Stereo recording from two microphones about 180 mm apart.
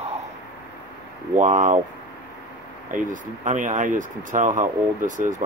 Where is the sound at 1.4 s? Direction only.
45° right (ahead or behind).